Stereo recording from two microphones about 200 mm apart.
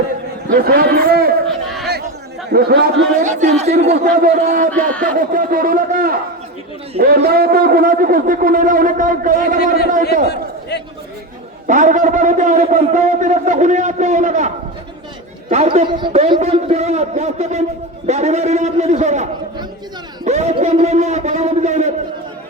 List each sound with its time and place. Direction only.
0.4 s speech: 50° right (ahead or behind)
2.5 s speech: 50° right (ahead or behind)
4.7 s speech: 5° left (ahead or behind)
5.1 s speech: 45° right (ahead or behind)
11.7 s a man's voice: 40° right (ahead or behind)